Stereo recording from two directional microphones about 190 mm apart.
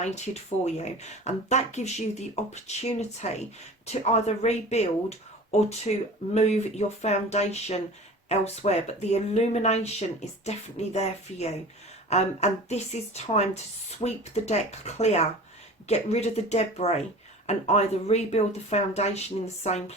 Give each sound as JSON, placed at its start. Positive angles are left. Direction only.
{"t": 0.6, "sound": "speech", "side_deg": 35}